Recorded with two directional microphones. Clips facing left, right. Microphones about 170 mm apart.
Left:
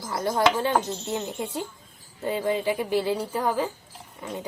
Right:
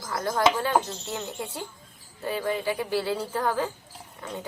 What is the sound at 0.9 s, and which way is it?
Speech, 20° left (ahead or behind).